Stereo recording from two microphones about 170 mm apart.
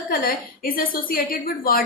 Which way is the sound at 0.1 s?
55° left (ahead or behind).